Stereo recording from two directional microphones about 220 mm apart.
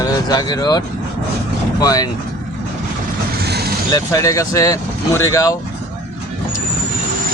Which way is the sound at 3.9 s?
15° left (ahead or behind).